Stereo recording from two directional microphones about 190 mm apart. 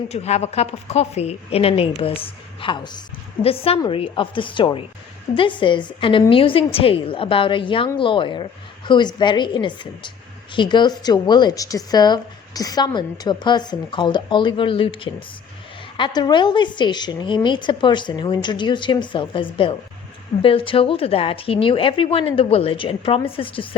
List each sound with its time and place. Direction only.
0.1 s a woman's voice: 35° left (ahead or behind)